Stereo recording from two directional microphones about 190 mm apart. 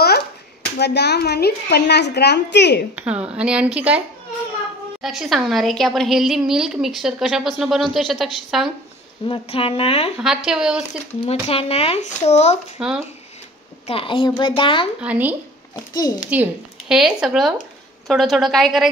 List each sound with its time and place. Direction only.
0.7 s a woman's voice: 60° left (ahead or behind)
3.0 s a woman's voice: 5° right (ahead or behind)
5.0 s a woman's voice: centre (ahead or behind)
9.3 s speech: 30° left (ahead or behind)
10.2 s a woman's voice: 5° right (ahead or behind)
11.2 s speech: 30° left (ahead or behind)
12.8 s a woman's voice: 5° right (ahead or behind)
13.8 s a child's voice: 30° left (ahead or behind)
15.0 s speech: 10° right (ahead or behind)
15.7 s a child's voice: 20° left (ahead or behind)
16.3 s a woman's voice: 10° right (ahead or behind)